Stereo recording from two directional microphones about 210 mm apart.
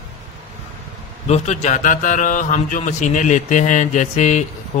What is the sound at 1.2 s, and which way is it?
Speech, 30° left (ahead or behind).